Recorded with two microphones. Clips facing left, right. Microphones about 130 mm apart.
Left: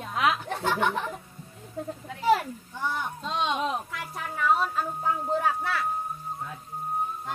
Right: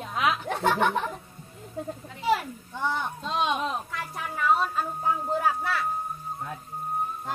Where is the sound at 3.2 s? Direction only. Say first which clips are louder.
Even; centre (ahead or behind).